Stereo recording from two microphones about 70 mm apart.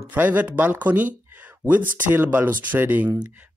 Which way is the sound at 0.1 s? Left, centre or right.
Right.